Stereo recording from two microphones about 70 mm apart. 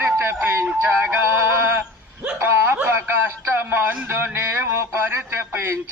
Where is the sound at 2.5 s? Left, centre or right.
Right.